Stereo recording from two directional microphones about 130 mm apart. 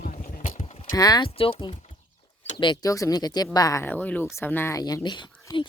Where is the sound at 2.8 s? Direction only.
25° left (ahead or behind).